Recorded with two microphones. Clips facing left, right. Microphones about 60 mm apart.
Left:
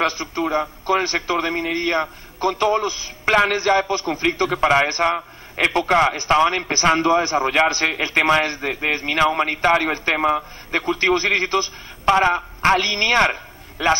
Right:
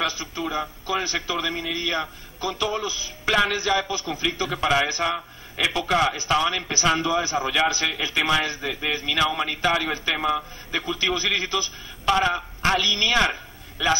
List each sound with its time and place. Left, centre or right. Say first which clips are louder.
0.0 s a man's voice: left 6 dB; left
12.1 s a man's voice: left 5 dB; left